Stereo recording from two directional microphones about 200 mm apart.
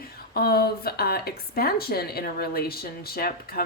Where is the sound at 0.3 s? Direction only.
50° left (ahead or behind).